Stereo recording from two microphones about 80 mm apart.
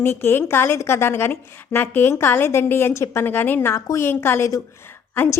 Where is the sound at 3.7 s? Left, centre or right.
Left.